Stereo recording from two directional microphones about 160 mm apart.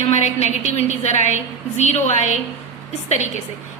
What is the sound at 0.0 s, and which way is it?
A woman's voice, 45° left (ahead or behind).